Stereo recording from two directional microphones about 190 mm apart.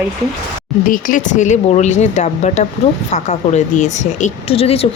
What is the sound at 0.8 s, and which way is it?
Speech, 45° left (ahead or behind).